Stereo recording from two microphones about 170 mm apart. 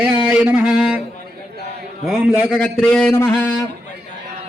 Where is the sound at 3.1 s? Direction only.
10° left (ahead or behind).